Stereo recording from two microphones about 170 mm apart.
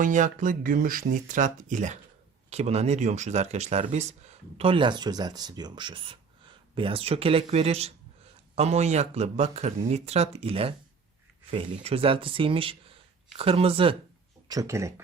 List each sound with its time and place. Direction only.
0.0 s speech: 50° right (ahead or behind); by 13.9 s 30° right (ahead or behind)
14.4 s speech: 20° right (ahead or behind)